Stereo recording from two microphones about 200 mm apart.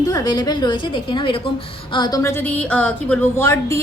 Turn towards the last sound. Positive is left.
turn(degrees=15)  # may be behind; listen again after turning